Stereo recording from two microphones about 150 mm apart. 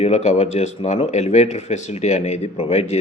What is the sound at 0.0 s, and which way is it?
Speech, 45° left (ahead or behind).